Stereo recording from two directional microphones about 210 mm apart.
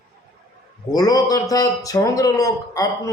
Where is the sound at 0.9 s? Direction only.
15° left (ahead or behind).